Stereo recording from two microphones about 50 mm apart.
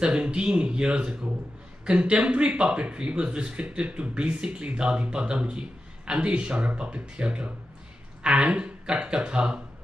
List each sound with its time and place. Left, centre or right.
0.0 s speech: centre